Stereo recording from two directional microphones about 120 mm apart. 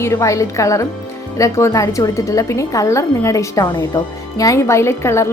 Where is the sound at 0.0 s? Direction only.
25° left (ahead or behind).